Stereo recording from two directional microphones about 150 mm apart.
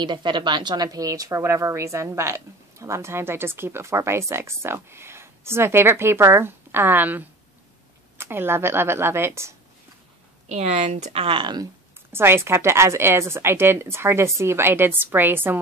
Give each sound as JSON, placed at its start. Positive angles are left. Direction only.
{"t": 0.0, "sound": "a woman's voice", "side_deg": -30}
{"t": 10.5, "sound": "speech", "side_deg": -45}
{"t": 11.2, "sound": "speech", "side_deg": -30}
{"t": 12.1, "sound": "a woman's voice", "side_deg": -15}